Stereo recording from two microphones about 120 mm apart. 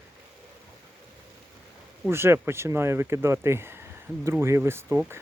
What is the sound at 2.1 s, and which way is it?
Speech, 20° right (ahead or behind).